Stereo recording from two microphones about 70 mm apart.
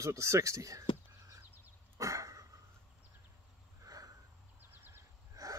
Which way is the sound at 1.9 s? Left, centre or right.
Right.